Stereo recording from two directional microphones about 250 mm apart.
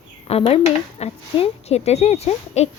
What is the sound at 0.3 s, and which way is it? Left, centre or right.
Speech, left.